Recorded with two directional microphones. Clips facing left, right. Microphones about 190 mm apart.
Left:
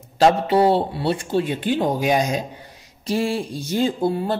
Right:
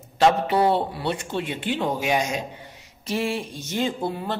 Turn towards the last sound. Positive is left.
turn(degrees=35)  # may be behind; listen again after turning